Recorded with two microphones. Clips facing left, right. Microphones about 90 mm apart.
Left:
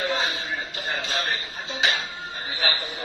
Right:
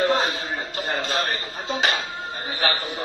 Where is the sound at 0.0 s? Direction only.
45° right (ahead or behind).